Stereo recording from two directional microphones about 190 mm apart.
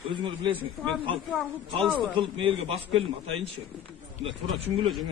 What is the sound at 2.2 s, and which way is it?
Speech, 25° right (ahead or behind).